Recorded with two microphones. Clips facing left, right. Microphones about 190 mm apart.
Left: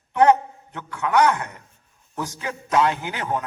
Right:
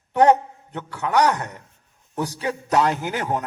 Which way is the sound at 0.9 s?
35° right (ahead or behind).